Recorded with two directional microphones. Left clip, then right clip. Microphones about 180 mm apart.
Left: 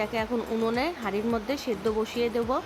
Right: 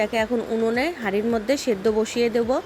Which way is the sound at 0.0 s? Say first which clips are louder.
Right 6 dB; 20° right (ahead or behind).